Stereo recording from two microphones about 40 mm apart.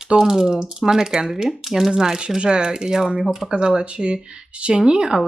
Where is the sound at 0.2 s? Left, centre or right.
Centre.